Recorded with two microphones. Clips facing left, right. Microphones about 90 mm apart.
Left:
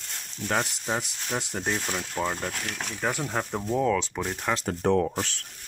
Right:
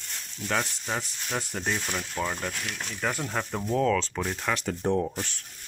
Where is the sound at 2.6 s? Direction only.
45° left (ahead or behind).